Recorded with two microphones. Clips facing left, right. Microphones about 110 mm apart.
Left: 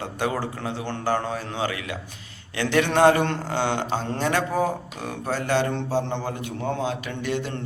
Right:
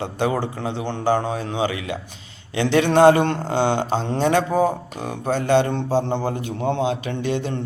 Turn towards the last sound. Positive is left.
turn(degrees=-20)  # may be behind; listen again after turning